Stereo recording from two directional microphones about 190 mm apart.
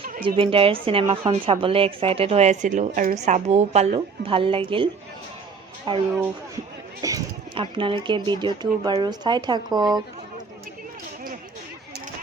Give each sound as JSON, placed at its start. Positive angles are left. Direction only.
{"t": 0.2, "sound": "a woman's voice", "side_deg": -25}
{"t": 5.9, "sound": "a woman's voice", "side_deg": -25}